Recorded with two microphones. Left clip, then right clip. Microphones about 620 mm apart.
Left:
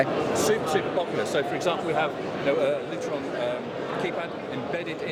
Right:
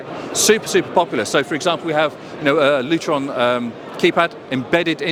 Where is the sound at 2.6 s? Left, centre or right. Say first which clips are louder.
Right 10 dB; right.